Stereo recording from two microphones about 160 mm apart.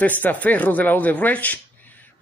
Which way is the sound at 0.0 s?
10° left (ahead or behind).